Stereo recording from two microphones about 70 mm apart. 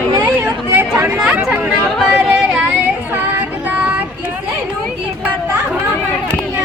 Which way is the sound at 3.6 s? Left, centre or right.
Right.